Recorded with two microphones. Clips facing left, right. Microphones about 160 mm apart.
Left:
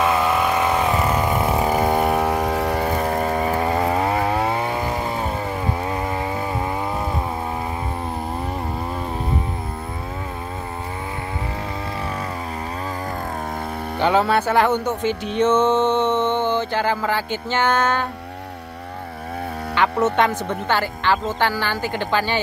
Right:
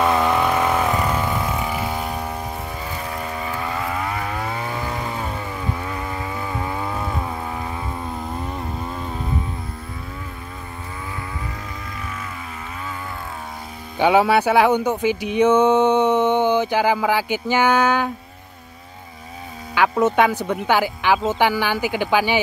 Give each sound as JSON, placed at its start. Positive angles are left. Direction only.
{"t": 0.0, "sound": "chainsaw", "side_deg": 5}
{"t": 1.2, "sound": "chainsaw", "side_deg": 25}
{"t": 1.7, "sound": "vehicle", "side_deg": 50}
{"t": 2.0, "sound": "chainsaw", "side_deg": 75}
{"t": 13.9, "sound": "a sound", "side_deg": -10}
{"t": 19.7, "sound": "speech", "side_deg": -5}